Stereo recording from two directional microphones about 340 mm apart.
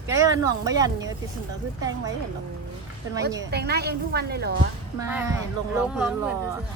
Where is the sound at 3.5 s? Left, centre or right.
Right.